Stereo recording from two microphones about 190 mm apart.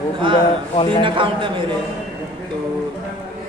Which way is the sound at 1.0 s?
25° right (ahead or behind).